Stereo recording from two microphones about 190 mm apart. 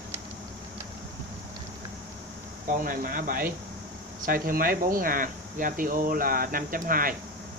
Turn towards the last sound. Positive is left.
turn(degrees=-50)  # may be behind; listen again after turning